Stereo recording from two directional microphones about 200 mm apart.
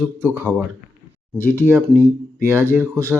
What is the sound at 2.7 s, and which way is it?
Speech, 10° right (ahead or behind).